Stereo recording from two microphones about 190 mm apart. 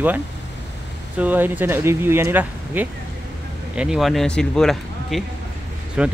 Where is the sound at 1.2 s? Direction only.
10° right (ahead or behind).